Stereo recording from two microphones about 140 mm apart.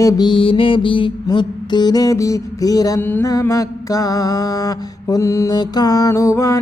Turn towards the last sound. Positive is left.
turn(degrees=20)  # may be behind; listen again after turning